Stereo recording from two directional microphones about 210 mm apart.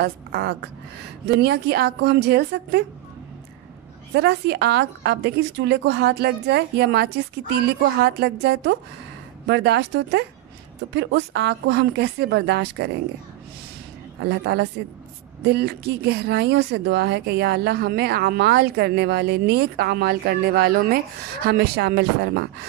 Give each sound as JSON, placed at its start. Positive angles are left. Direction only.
{"t": 0.0, "sound": "speech", "side_deg": -50}
{"t": 4.1, "sound": "a woman's voice", "side_deg": -50}
{"t": 14.2, "sound": "speech", "side_deg": -50}